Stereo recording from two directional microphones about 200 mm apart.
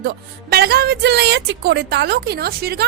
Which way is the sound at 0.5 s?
50° right (ahead or behind).